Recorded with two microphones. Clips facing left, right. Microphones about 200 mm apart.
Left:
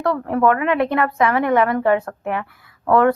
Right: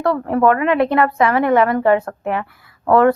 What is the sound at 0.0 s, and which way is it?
Speech, 35° right (ahead or behind).